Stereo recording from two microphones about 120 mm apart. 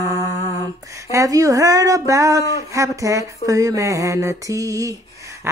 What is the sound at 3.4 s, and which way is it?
Mantra, 30° right (ahead or behind).